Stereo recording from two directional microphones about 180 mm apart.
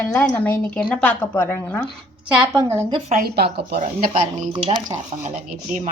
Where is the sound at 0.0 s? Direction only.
10° left (ahead or behind).